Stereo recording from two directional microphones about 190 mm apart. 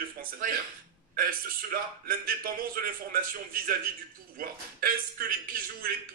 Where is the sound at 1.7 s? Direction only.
50° right (ahead or behind).